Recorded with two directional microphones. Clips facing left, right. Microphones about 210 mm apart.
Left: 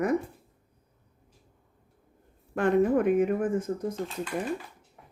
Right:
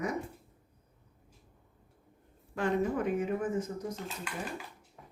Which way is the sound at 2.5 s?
55° left (ahead or behind).